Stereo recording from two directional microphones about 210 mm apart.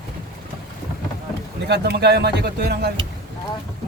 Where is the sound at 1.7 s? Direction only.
50° right (ahead or behind).